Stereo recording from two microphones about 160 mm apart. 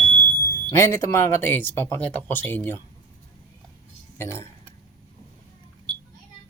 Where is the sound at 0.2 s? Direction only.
15° left (ahead or behind).